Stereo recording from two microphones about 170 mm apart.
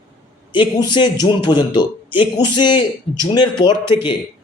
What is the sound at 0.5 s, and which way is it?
A man's voice, 25° left (ahead or behind).